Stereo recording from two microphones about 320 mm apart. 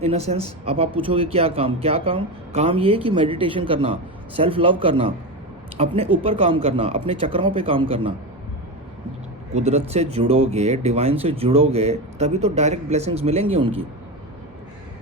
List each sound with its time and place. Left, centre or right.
0.0 s speech: centre
9.6 s speech: centre